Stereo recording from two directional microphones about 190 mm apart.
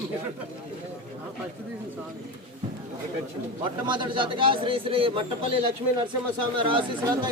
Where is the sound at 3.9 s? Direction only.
25° right (ahead or behind).